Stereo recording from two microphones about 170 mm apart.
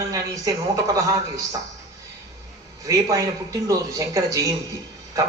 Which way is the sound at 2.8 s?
20° right (ahead or behind).